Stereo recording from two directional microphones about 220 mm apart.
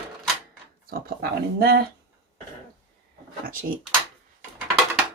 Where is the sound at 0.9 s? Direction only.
45° right (ahead or behind).